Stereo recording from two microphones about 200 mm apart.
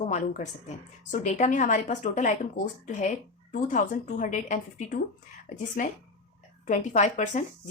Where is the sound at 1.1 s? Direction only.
35° left (ahead or behind).